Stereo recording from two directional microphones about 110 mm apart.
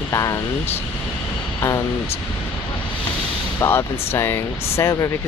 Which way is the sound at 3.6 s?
20° left (ahead or behind).